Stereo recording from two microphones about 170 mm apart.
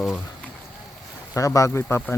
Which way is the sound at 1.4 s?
20° left (ahead or behind).